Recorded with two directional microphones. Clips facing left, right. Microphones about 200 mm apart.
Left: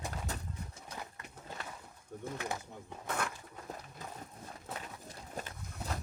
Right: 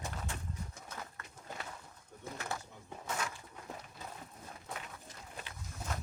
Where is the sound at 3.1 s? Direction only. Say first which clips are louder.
Left 2 dB; 55° left (ahead or behind).